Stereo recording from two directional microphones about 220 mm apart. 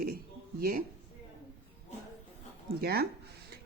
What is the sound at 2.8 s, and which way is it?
Speech, 45° right (ahead or behind).